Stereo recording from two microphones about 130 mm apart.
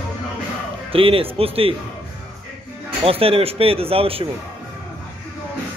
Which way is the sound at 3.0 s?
45° right (ahead or behind).